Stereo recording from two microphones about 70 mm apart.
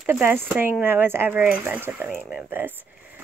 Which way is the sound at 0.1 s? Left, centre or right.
Right.